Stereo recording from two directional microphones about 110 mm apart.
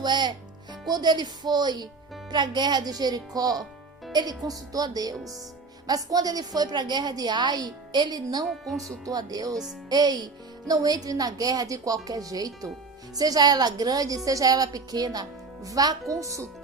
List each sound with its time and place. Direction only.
0.0 s a woman's voice: 40° right (ahead or behind)
8.4 s speech: centre (ahead or behind)
9.0 s a woman's voice: 35° right (ahead or behind)